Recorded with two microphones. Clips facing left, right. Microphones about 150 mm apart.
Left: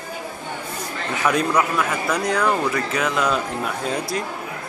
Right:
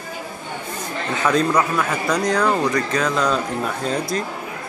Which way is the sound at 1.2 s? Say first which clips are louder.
Right 1 dB; 10° left (ahead or behind).